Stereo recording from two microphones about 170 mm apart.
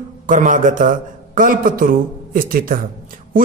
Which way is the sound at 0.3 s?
50° right (ahead or behind).